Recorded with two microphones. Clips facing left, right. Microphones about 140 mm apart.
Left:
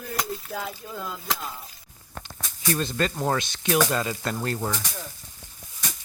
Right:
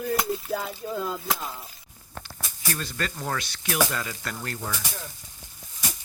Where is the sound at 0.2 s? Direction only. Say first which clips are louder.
Right 3 dB; 5° right (ahead or behind).